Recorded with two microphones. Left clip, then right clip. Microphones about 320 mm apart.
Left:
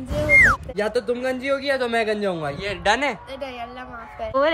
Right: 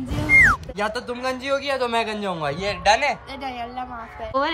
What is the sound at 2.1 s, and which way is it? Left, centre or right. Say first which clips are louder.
Speech: left 2 dB; centre.